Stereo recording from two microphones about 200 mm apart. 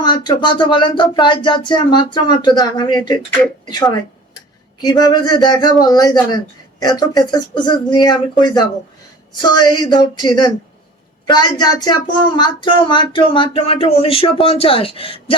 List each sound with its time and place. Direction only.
0.0 s speech: 20° left (ahead or behind)